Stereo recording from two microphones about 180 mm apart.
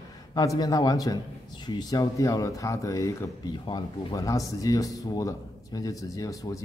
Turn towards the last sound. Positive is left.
turn(degrees=20)  # may be behind; listen again after turning